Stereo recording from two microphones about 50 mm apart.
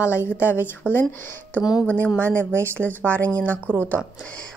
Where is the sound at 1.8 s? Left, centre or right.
Left.